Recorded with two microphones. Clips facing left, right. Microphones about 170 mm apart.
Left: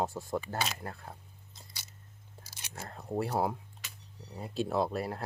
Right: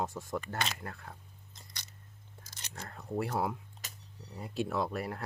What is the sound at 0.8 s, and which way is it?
Speech, 30° left (ahead or behind).